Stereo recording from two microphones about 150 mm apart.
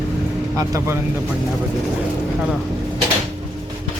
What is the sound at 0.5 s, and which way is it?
Speech, 25° right (ahead or behind).